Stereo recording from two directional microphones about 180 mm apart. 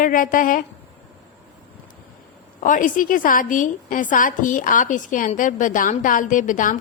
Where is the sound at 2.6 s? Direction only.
45° left (ahead or behind).